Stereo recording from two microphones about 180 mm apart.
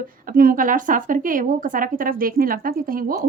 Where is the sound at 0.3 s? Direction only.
50° right (ahead or behind).